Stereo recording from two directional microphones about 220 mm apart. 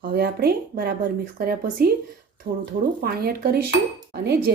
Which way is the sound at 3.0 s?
45° right (ahead or behind).